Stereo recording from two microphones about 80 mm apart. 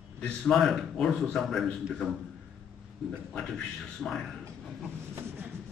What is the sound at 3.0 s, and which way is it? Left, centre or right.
A man's voice, centre.